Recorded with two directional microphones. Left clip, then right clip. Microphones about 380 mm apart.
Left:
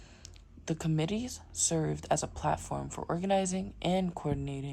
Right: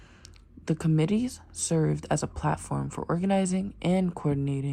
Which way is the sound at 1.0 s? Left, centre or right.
Centre.